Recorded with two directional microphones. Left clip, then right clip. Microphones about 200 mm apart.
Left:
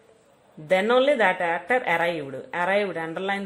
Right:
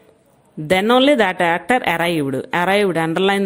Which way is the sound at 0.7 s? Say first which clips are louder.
Right 6 dB; 30° right (ahead or behind).